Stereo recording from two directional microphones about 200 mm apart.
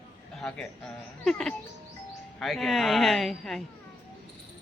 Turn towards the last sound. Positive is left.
turn(degrees=0)  # may be behind; listen again after turning